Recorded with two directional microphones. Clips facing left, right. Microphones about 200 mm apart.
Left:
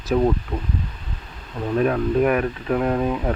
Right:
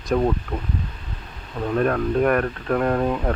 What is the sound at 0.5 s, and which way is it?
Speech, 5° right (ahead or behind).